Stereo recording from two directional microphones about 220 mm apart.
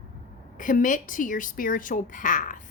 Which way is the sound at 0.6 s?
35° left (ahead or behind).